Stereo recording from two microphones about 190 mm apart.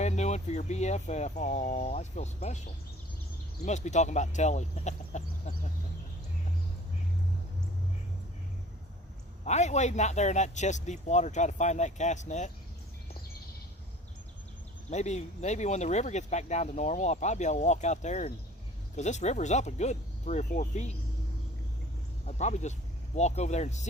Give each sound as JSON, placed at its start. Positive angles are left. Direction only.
{"t": 0.0, "sound": "speech", "side_deg": 35}
{"t": 3.7, "sound": "speech", "side_deg": 40}
{"t": 9.4, "sound": "speech", "side_deg": 35}
{"t": 14.8, "sound": "speech", "side_deg": 35}
{"t": 22.3, "sound": "speech", "side_deg": 35}